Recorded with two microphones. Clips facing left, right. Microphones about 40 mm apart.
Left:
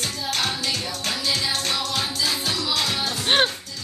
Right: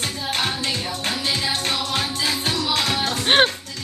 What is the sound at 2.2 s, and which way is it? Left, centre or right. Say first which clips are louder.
Music: right 2 dB; right.